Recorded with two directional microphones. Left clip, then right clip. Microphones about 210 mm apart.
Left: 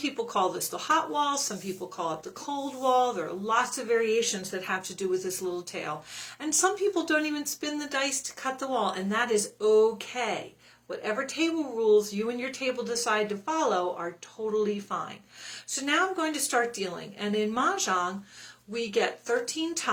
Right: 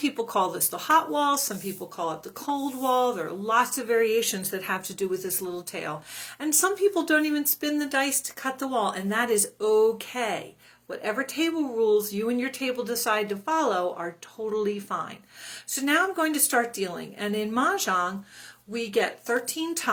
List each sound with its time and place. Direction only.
0.0 s speech: 50° right (ahead or behind)